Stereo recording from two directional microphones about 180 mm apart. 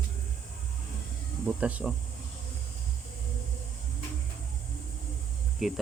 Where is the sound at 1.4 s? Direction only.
10° right (ahead or behind).